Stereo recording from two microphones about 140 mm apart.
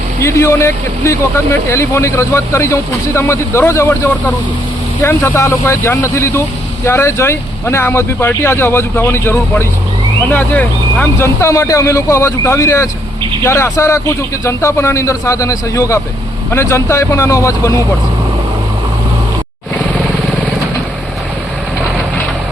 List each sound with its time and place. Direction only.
0.2 s speech: 20° left (ahead or behind)